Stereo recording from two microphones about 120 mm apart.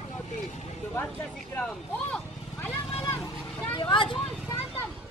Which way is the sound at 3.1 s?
20° left (ahead or behind).